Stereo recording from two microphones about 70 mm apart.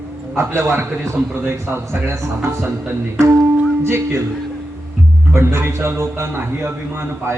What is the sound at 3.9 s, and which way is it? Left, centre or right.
Speech, right.